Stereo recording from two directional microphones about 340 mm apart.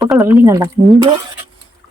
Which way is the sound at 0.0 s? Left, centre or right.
Centre.